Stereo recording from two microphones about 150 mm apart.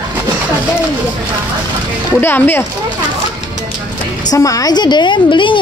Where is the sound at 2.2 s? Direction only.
15° left (ahead or behind).